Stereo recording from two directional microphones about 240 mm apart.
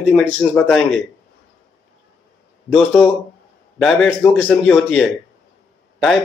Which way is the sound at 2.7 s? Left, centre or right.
Centre.